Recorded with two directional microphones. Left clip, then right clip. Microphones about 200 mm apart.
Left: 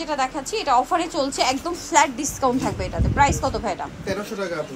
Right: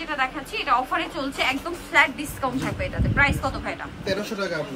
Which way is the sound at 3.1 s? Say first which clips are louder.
Left 3 dB; 25° left (ahead or behind).